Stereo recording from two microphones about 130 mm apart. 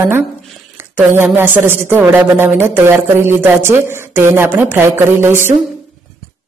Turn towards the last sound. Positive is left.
turn(degrees=-15)  # may be behind; listen again after turning